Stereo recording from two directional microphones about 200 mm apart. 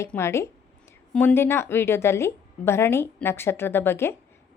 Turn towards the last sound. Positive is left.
turn(degrees=10)  # may be behind; listen again after turning